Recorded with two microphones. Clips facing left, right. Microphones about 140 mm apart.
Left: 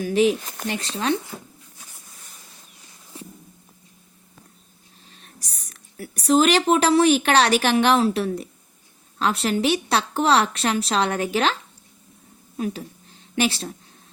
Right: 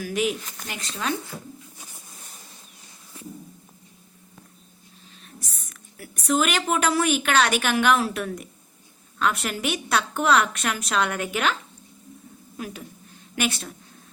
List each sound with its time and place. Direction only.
0.0 s a woman's voice: 30° left (ahead or behind)
0.4 s speech: 50° left (ahead or behind)
0.7 s a woman's voice: 30° left (ahead or behind)
5.2 s a woman's voice: 40° left (ahead or behind)
12.5 s a woman's voice: 25° left (ahead or behind)